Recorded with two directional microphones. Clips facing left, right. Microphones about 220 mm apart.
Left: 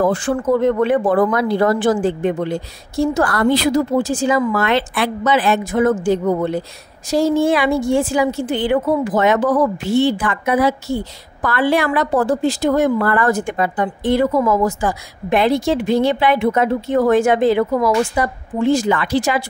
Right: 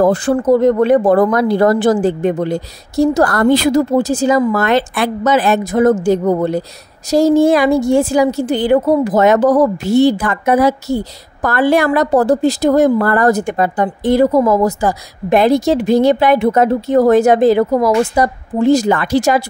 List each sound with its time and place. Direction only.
0.0 s a woman's voice: 40° right (ahead or behind)